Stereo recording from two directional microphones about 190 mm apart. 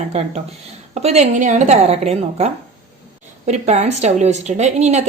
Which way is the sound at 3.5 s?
35° right (ahead or behind).